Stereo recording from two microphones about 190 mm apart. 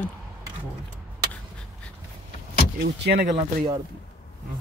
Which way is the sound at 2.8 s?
55° right (ahead or behind).